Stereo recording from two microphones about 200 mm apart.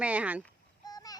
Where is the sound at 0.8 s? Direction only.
20° left (ahead or behind).